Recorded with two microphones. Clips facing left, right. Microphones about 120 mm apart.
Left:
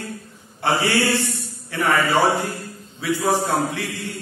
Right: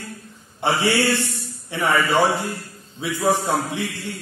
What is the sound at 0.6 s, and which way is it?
Mantra, 20° right (ahead or behind).